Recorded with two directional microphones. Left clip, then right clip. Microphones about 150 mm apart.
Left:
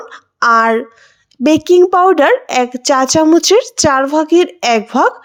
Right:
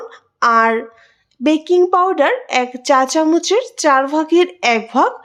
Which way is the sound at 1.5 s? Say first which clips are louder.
Left 4 dB; 45° left (ahead or behind).